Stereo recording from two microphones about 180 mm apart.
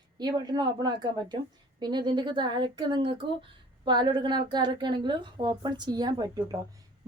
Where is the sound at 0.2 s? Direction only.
25° right (ahead or behind).